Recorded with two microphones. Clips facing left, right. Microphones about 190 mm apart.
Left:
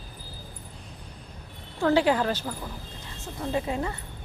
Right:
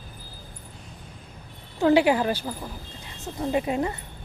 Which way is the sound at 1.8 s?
15° right (ahead or behind).